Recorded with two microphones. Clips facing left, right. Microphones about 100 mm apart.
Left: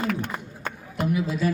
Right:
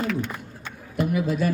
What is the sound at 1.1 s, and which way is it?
Speech, 50° right (ahead or behind).